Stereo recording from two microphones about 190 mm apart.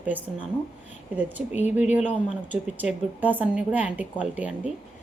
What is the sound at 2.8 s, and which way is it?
A woman's voice, 10° right (ahead or behind).